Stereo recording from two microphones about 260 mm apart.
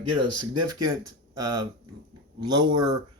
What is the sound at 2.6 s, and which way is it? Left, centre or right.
Speech, centre.